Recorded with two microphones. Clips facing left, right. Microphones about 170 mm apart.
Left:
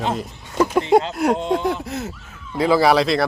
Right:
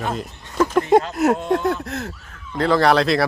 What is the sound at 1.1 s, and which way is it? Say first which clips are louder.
Speech: right 1 dB; centre (ahead or behind).